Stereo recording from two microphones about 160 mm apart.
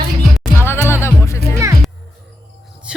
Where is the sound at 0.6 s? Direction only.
15° left (ahead or behind).